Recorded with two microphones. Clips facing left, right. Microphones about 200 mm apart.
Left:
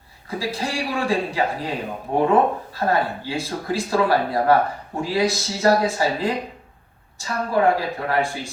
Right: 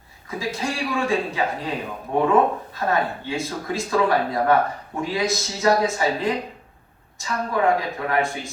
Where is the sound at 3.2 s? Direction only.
35° left (ahead or behind).